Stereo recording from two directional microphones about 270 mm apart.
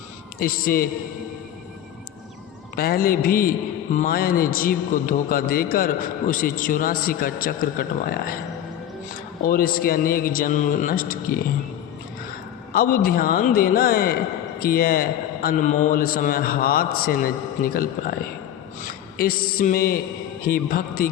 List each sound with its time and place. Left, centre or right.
0.3 s a man's voice: left
2.7 s a man's voice: left
9.5 s a man's voice: left
12.7 s a man's voice: left
19.1 s mantra: left
20.5 s a man's voice: left